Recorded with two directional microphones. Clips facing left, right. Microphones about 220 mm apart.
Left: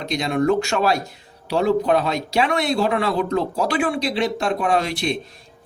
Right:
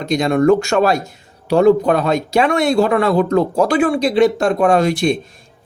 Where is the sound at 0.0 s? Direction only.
50° right (ahead or behind).